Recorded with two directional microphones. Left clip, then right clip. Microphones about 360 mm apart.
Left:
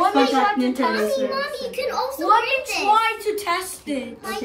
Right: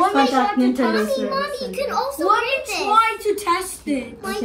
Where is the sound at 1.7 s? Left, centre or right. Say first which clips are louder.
Right 1 dB; left.